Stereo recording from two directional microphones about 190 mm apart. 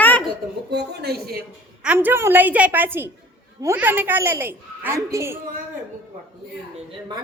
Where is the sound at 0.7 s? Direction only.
60° right (ahead or behind).